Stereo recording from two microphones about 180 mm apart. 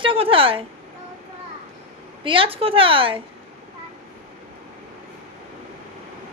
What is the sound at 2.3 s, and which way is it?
Speech, 30° right (ahead or behind).